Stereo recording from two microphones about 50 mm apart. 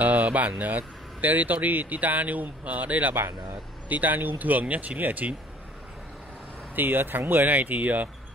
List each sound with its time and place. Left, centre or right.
0.0 s a sound: right
0.6 s speech: right
6.7 s speech: right